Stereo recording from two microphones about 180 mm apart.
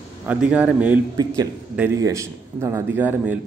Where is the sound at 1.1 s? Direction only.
20° right (ahead or behind).